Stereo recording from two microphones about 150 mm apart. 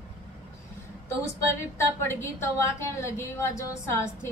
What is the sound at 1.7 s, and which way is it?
A woman's voice, 15° left (ahead or behind).